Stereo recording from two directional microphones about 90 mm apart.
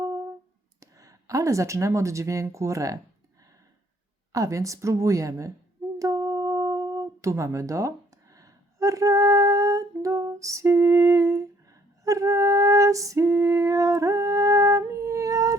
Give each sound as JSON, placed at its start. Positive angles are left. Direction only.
{"t": 0.0, "sound": "clicking", "side_deg": -35}
{"t": 0.8, "sound": "speech", "side_deg": -40}
{"t": 4.3, "sound": "a woman's voice", "side_deg": -35}
{"t": 6.0, "sound": "humming", "side_deg": -40}